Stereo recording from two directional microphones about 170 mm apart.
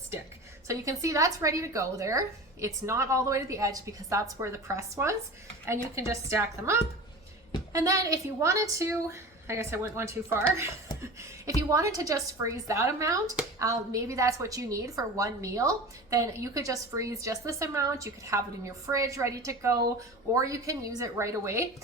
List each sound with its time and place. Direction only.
0.7 s a woman's voice: 20° right (ahead or behind)